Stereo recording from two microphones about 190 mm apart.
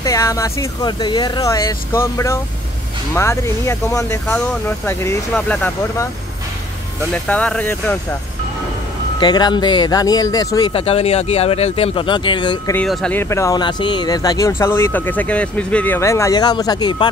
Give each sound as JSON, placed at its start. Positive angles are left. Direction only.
{"t": 0.0, "sound": "speech", "side_deg": 15}
{"t": 7.2, "sound": "speech", "side_deg": 5}
{"t": 9.2, "sound": "speech", "side_deg": 20}
{"t": 12.7, "sound": "speech", "side_deg": 5}